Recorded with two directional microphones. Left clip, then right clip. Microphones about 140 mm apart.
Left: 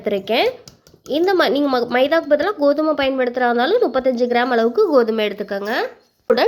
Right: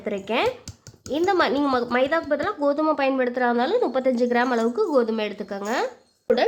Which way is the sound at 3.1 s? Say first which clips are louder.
Left 4 dB; 10° left (ahead or behind).